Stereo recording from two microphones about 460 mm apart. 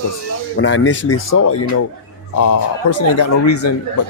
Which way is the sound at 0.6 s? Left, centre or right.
Left.